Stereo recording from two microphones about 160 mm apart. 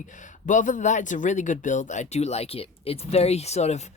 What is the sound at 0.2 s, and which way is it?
Speech, 55° left (ahead or behind).